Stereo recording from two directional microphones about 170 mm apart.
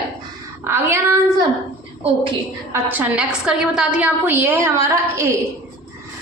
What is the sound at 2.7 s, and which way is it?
A woman's voice, 10° right (ahead or behind).